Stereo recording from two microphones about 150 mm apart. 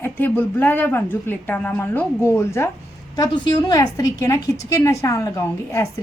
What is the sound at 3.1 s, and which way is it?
A woman's voice, 30° left (ahead or behind).